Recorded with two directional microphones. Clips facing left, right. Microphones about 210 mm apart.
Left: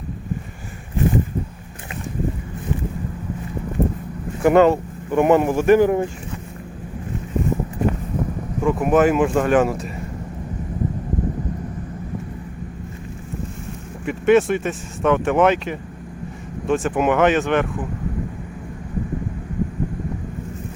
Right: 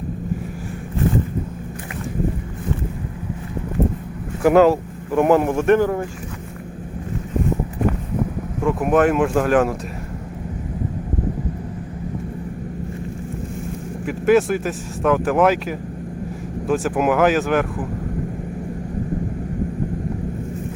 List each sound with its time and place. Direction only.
4.4 s speech: centre (ahead or behind)
5.8 s speech: 20° left (ahead or behind)
8.6 s speech: centre (ahead or behind)
14.0 s speech: centre (ahead or behind)